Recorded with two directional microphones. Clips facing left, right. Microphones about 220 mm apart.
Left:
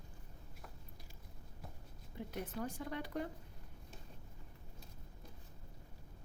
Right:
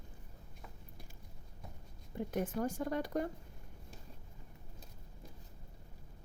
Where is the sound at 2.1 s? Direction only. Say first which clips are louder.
Right 7 dB; 50° right (ahead or behind).